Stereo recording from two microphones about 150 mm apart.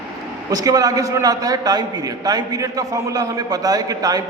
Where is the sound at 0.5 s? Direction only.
25° right (ahead or behind).